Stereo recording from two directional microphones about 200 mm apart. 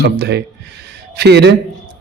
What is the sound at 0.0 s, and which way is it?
A man's voice, 55° right (ahead or behind).